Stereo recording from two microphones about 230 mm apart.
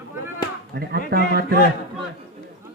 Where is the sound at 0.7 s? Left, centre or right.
Right.